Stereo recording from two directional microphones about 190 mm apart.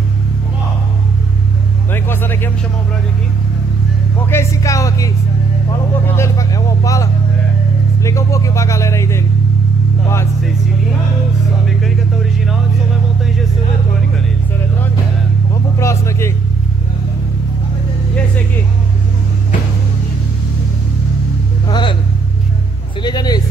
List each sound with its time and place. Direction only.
1.9 s vehicle: 10° left (ahead or behind)
4.3 s speech: 15° left (ahead or behind)
15.5 s speech: 15° left (ahead or behind)
21.6 s vehicle: 25° left (ahead or behind)
23.0 s speech: 20° left (ahead or behind)